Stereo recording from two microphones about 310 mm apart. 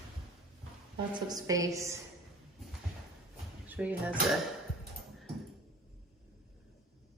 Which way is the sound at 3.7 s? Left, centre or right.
Centre.